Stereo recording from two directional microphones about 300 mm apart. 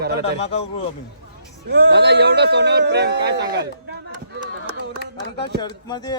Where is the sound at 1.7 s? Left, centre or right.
Right.